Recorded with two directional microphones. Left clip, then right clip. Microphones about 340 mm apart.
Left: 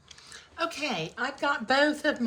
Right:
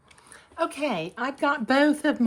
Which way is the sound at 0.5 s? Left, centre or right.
Centre.